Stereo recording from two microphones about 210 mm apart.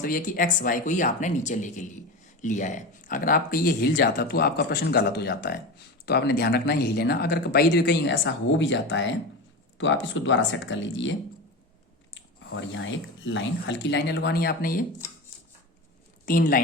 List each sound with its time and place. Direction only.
0.0 s speech: 40° left (ahead or behind); by 11.1 s 65° left (ahead or behind)
12.1 s speech: 65° left (ahead or behind); by 14.8 s 40° left (ahead or behind)
16.2 s speech: 40° left (ahead or behind)